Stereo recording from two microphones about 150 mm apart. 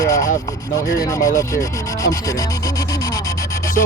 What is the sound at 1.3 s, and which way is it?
Speech, 20° left (ahead or behind).